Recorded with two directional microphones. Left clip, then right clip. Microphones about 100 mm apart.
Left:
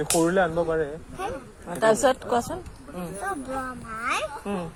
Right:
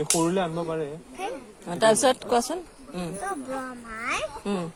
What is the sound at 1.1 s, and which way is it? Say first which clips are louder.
Speech: left 1 dB; 20° right (ahead or behind).